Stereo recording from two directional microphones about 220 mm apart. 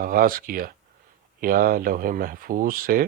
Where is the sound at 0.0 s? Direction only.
40° right (ahead or behind).